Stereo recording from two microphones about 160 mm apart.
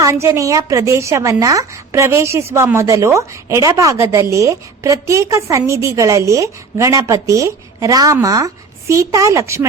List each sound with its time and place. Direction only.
0.0 s a woman's voice: 15° right (ahead or behind)